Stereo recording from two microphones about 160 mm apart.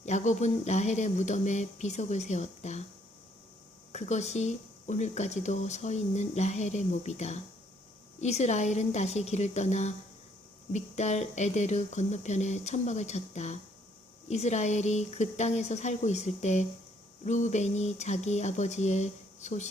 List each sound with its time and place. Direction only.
0.0 s speech: 45° left (ahead or behind)
3.9 s speech: 45° left (ahead or behind)